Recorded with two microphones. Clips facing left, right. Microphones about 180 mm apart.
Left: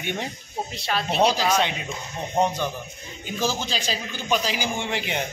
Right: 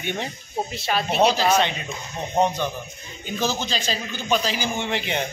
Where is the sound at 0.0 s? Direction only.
10° left (ahead or behind).